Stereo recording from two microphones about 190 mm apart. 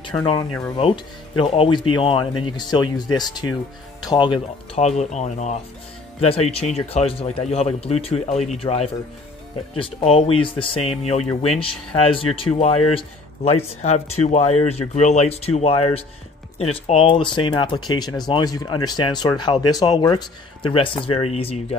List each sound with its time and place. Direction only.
0.2 s speech: 25° left (ahead or behind)
4.8 s speech: 35° left (ahead or behind)